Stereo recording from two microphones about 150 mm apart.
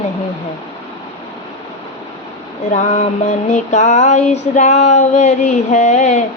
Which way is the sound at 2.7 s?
50° left (ahead or behind).